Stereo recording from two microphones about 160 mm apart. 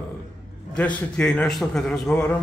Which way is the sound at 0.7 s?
10° left (ahead or behind).